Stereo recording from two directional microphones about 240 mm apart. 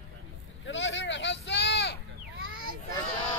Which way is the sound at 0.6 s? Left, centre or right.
Left.